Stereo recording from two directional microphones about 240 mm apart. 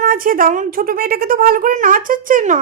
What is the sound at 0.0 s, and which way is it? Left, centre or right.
A woman's voice, right.